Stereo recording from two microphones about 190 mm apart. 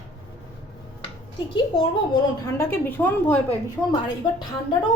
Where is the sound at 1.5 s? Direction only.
25° left (ahead or behind).